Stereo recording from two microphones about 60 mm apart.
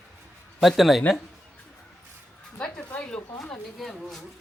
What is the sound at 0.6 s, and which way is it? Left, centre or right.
Speech, centre.